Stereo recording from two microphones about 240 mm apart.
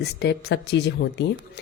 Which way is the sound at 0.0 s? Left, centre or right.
Left.